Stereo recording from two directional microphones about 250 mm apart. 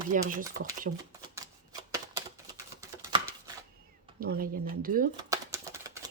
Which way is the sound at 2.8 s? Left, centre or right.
Centre.